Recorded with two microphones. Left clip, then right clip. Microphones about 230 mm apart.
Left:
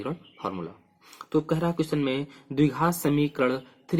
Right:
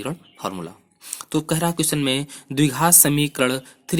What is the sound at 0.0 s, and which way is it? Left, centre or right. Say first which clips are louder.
Speech: right 4 dB; right.